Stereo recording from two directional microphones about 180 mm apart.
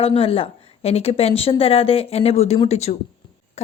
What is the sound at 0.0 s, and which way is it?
A woman's voice, 30° left (ahead or behind).